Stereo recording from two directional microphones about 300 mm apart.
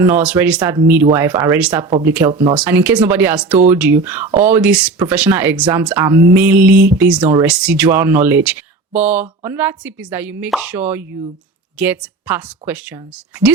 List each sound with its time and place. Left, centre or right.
0.0 s speech: centre
2.3 s speech: centre
2.6 s speech: centre